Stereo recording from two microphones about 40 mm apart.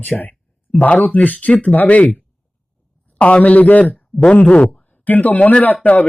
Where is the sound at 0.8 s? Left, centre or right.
Left.